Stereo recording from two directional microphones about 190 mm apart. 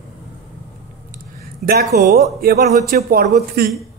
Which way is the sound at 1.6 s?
40° right (ahead or behind).